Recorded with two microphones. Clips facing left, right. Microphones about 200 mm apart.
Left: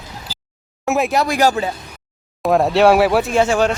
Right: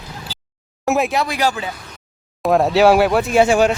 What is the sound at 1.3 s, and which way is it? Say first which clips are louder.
Speech: left 4 dB; 45° left (ahead or behind).